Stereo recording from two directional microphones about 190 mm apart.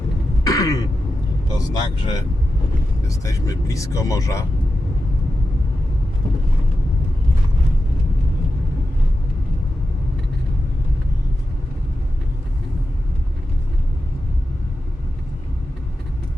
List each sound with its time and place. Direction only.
0.4 s throat clearing: 15° left (ahead or behind)
1.5 s speech: 20° left (ahead or behind)